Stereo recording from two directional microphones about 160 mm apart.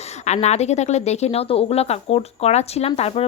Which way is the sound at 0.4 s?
45° left (ahead or behind).